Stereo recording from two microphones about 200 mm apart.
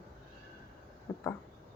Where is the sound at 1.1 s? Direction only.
15° left (ahead or behind).